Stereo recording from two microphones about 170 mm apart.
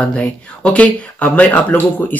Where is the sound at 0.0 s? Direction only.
5° left (ahead or behind).